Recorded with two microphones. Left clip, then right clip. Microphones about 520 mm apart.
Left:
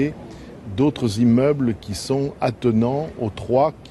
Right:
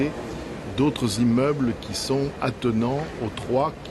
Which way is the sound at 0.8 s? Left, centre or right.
Right.